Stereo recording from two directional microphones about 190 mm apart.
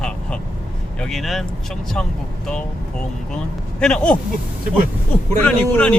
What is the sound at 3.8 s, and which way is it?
Speech, 5° left (ahead or behind).